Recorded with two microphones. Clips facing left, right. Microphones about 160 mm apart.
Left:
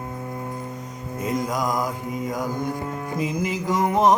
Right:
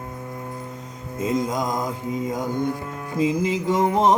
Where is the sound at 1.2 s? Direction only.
25° right (ahead or behind).